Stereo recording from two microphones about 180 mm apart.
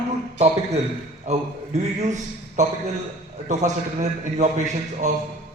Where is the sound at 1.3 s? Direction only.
40° right (ahead or behind).